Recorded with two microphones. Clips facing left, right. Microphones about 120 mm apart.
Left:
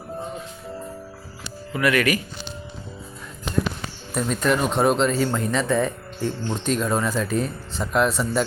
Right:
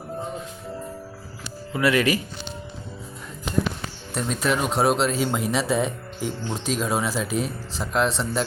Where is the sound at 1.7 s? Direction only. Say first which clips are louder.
Even; 25° right (ahead or behind).